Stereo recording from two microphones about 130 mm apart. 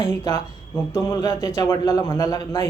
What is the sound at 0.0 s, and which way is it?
A man's voice, 20° left (ahead or behind).